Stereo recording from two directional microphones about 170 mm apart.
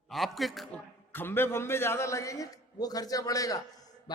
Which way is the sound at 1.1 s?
10° left (ahead or behind).